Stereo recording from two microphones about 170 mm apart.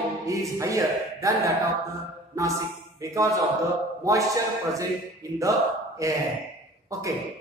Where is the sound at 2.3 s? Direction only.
20° right (ahead or behind).